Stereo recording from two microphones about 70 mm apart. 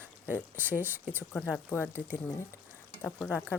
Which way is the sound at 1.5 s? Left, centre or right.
Left.